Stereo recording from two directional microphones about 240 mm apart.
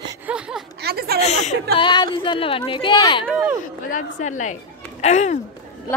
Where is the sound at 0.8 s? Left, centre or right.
Right.